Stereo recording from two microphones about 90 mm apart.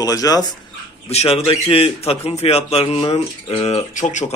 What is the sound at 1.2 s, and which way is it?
A man's voice, 90° left.